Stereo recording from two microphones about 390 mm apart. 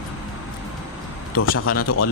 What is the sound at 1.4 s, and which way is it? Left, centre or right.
Speech, left.